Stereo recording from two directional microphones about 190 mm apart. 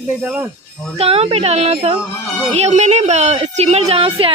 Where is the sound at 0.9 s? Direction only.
30° right (ahead or behind).